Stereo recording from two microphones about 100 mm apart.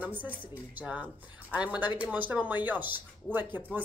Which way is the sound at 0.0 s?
20° right (ahead or behind).